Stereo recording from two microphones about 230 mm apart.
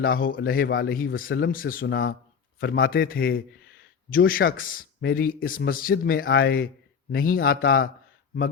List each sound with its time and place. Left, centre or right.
0.0 s speech: left